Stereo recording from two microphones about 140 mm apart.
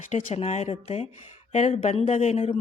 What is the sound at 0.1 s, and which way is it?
Speech, 50° left (ahead or behind).